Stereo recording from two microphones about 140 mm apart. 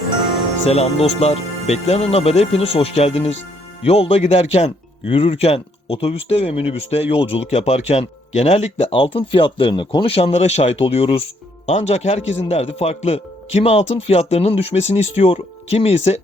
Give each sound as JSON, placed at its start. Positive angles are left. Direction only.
{"t": 0.6, "sound": "speech", "side_deg": 50}